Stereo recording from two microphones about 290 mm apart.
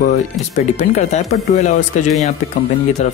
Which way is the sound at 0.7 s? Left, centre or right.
Left.